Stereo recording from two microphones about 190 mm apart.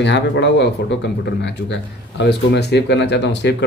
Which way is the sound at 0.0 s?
65° left (ahead or behind).